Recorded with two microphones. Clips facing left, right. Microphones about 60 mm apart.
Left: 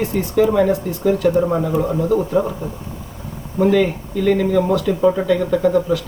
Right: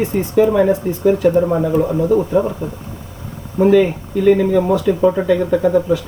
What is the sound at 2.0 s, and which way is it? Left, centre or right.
Speech, centre.